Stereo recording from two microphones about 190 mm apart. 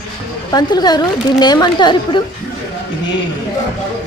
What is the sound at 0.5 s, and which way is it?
A woman's voice, 20° left (ahead or behind).